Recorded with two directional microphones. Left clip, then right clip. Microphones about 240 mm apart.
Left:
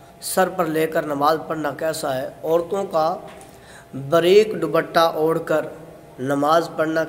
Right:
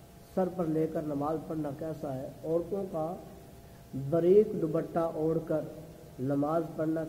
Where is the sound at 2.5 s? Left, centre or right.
Left.